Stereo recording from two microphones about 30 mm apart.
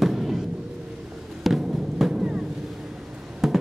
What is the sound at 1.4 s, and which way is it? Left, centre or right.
Music, centre.